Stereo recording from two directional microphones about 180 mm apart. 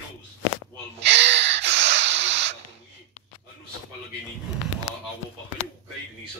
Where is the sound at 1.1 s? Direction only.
80° right.